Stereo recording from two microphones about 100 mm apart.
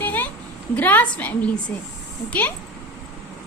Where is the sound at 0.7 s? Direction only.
15° left (ahead or behind).